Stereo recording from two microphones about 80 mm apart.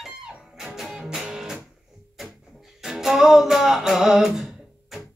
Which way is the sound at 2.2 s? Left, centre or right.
Centre.